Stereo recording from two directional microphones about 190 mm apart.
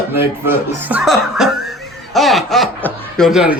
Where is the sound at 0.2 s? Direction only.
10° right (ahead or behind).